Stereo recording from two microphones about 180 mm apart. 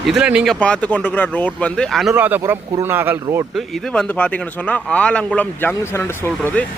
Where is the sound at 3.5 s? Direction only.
Centre (ahead or behind).